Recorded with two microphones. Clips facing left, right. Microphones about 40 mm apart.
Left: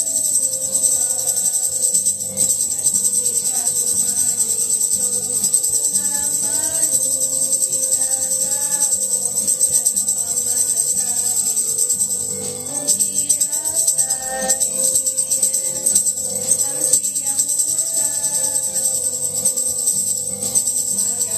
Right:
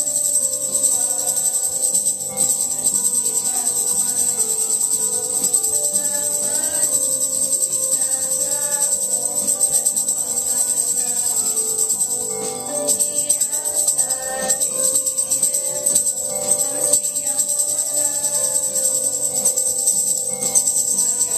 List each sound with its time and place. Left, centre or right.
12.7 s music: centre
16.4 s music: centre